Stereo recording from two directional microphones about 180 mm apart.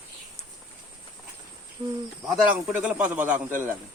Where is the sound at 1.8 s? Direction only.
20° right (ahead or behind).